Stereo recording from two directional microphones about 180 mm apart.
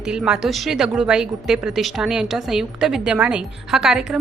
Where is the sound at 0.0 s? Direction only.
5° right (ahead or behind).